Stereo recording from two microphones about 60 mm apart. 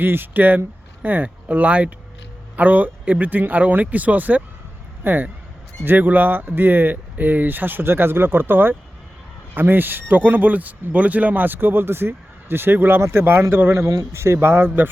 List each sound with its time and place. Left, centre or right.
0.0 s speech: right
13.8 s speech: right
14.1 s speech: right